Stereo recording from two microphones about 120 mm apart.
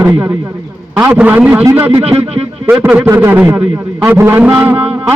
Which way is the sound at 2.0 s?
55° right (ahead or behind).